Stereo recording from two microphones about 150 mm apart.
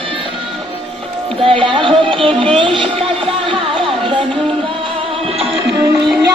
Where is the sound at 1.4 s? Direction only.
35° right (ahead or behind).